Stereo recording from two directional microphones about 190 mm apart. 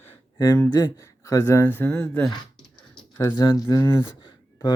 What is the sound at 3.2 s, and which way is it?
Speech, 20° left (ahead or behind).